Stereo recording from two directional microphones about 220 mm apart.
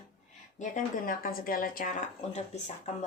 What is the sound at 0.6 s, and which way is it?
A woman's voice, 40° left (ahead or behind).